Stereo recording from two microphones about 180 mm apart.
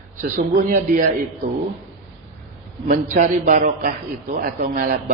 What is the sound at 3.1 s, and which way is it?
A man's voice, 45° right (ahead or behind).